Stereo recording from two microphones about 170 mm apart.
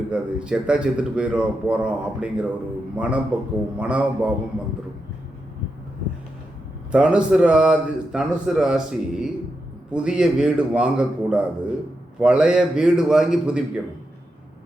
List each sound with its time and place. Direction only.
0.1 s a man's voice: 5° right (ahead or behind)
6.9 s a man's voice: 5° right (ahead or behind)